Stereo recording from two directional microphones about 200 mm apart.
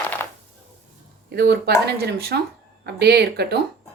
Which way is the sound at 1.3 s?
55° right (ahead or behind).